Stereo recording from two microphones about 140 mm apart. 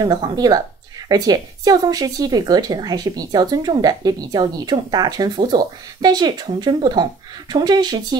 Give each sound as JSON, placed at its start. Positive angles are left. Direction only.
{"t": 0.0, "sound": "speech", "side_deg": -30}